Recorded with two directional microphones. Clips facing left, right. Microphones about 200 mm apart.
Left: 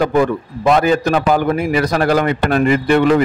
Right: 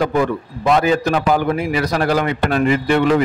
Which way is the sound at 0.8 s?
50° left (ahead or behind).